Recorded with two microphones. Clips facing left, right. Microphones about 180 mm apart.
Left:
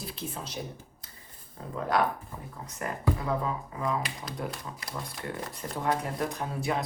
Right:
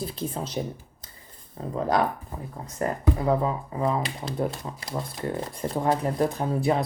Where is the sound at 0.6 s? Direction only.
30° right (ahead or behind).